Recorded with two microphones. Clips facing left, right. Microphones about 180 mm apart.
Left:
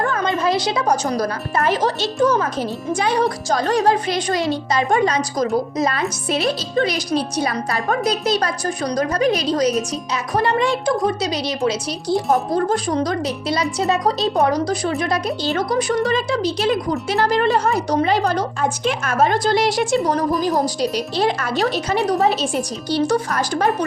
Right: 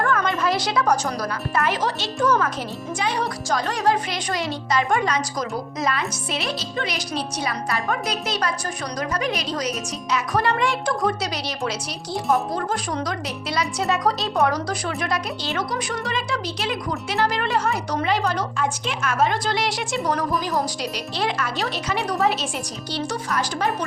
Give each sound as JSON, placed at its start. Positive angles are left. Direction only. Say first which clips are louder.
{"t": 0.0, "sound": "a woman's voice", "louder": "left 2 dB", "side_deg": 25}
{"t": 12.3, "sound": "a woman's voice", "louder": "left 2 dB", "side_deg": 35}